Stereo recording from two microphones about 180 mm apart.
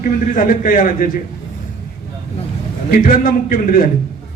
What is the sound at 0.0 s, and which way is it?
A man's voice, 50° left (ahead or behind).